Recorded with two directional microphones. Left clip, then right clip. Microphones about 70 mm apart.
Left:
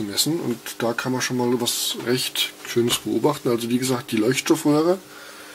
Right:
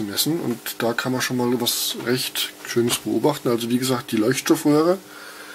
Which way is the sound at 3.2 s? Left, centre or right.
Centre.